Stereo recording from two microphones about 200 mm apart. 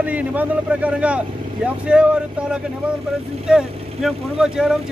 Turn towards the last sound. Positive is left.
turn(degrees=-5)  # may be behind; listen again after turning